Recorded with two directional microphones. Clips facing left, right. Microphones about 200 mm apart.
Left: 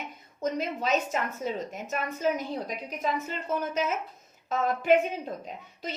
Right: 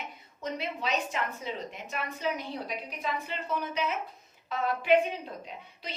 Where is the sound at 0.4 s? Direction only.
45° left (ahead or behind).